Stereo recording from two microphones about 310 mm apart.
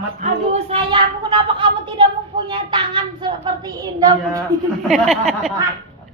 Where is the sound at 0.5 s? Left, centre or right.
Centre.